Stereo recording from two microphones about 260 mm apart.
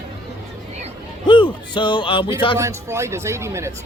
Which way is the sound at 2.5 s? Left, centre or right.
Centre.